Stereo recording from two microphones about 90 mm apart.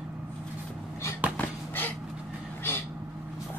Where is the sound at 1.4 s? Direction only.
20° left (ahead or behind).